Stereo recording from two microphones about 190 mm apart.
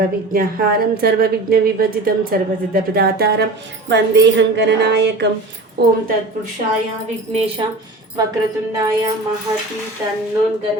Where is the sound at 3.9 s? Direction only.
70° right (ahead or behind).